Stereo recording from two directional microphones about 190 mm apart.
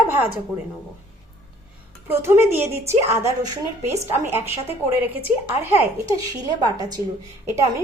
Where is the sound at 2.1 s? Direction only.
10° right (ahead or behind).